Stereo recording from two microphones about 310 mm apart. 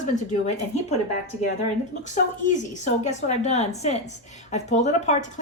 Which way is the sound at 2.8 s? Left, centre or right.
Left.